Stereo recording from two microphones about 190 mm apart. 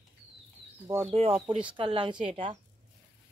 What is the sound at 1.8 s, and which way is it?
Speech, 25° right (ahead or behind).